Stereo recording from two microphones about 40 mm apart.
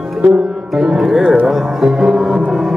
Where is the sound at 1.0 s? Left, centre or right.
Centre.